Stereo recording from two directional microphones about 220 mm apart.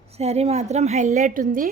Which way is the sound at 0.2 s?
30° right (ahead or behind).